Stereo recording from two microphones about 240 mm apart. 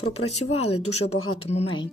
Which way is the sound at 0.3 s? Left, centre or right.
Left.